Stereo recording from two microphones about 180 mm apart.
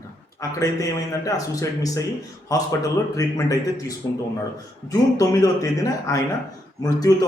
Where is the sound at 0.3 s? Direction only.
20° left (ahead or behind).